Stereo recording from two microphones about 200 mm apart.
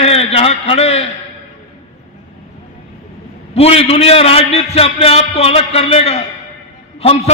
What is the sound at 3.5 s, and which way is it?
A man's voice, 30° left (ahead or behind).